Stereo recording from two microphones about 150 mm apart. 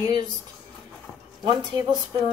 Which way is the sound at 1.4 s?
25° right (ahead or behind).